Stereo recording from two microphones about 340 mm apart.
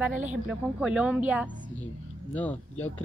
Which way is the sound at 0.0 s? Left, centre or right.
Centre.